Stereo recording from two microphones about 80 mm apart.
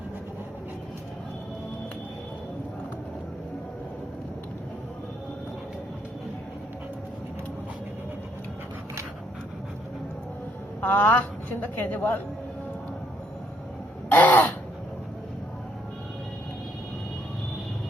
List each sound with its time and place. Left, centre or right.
10.8 s a woman's voice: left
14.1 s crow: left